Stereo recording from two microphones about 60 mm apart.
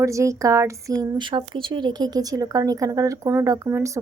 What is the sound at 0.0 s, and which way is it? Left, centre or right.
Speech, right.